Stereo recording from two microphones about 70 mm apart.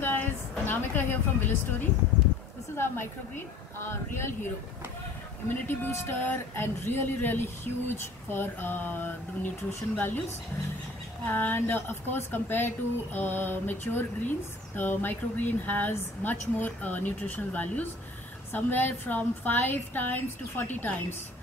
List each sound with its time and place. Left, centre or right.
0.0 s a sound: left
2.7 s speech: left
5.5 s a woman's voice: left
11.2 s a woman's voice: left